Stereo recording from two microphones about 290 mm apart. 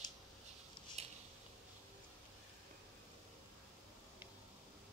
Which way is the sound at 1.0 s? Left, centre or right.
Right.